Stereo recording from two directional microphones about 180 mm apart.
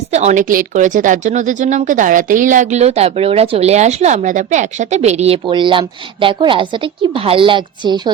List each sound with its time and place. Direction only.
0.1 s speech: 40° right (ahead or behind); by 8.1 s 25° right (ahead or behind)